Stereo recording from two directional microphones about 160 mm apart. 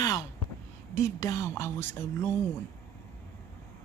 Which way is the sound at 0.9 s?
20° left (ahead or behind).